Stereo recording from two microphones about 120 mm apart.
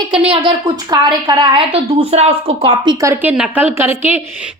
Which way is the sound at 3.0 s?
20° right (ahead or behind).